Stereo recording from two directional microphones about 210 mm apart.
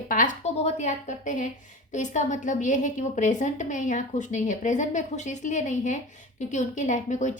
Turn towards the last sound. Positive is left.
turn(degrees=35)  # may be behind; listen again after turning